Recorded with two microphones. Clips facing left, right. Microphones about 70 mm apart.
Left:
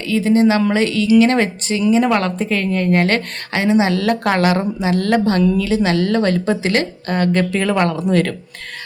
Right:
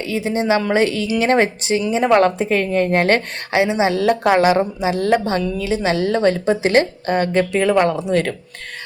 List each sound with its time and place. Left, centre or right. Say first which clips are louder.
0.0 s a woman's voice: left 6 dB; centre
3.5 s a woman's voice: left 1 dB; centre
5.2 s a woman's voice: left 5 dB; centre
6.7 s a woman's voice: right 3 dB; right
7.2 s a woman's voice: left 1 dB; centre